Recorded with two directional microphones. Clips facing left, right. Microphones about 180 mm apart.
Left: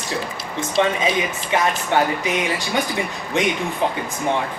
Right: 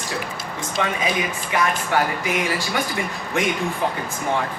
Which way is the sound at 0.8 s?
25° left (ahead or behind).